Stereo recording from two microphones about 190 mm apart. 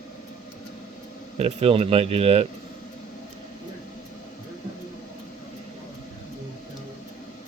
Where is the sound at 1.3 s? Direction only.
35° right (ahead or behind).